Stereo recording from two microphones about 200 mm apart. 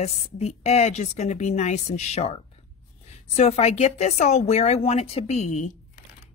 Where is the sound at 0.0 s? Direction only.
35° left (ahead or behind).